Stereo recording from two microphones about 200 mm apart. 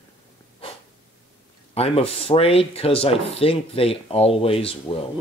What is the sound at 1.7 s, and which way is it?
Speech, 30° left (ahead or behind).